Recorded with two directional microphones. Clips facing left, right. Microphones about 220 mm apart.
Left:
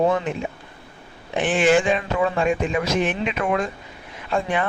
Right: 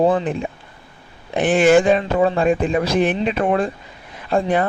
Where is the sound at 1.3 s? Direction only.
40° right (ahead or behind).